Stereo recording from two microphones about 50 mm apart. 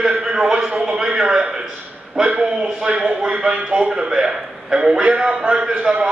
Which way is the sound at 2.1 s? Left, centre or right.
Centre.